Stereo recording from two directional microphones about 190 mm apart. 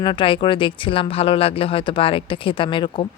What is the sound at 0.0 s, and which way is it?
Speech, 25° left (ahead or behind).